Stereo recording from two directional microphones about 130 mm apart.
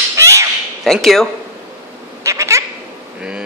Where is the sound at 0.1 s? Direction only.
20° right (ahead or behind).